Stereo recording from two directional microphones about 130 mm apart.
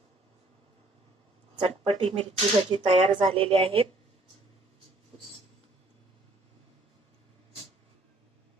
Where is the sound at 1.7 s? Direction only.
50° right (ahead or behind).